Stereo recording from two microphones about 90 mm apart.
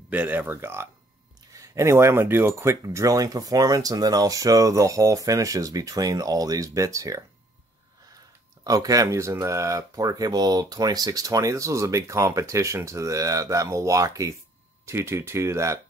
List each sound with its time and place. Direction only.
0.1 s speech: 20° right (ahead or behind); by 7.2 s 35° right (ahead or behind)
8.6 s speech: 40° right (ahead or behind)